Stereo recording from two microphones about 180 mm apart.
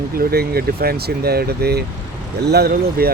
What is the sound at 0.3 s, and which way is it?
Speech, 60° right (ahead or behind).